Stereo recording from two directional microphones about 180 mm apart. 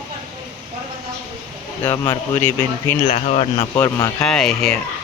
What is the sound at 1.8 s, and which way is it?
Speech, 15° left (ahead or behind).